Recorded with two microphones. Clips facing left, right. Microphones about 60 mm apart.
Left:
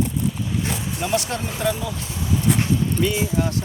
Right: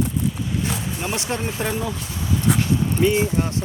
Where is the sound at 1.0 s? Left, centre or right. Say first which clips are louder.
Left 5 dB; right.